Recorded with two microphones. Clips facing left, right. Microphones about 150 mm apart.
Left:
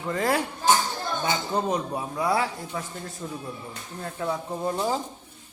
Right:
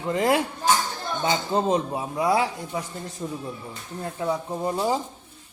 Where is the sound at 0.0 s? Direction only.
20° right (ahead or behind).